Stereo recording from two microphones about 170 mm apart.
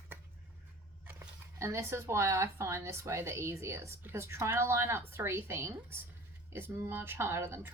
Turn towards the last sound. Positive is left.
turn(degrees=-15)  # may be behind; listen again after turning